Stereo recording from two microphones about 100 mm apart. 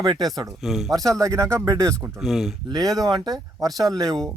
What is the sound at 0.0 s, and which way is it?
Speech, 45° right (ahead or behind).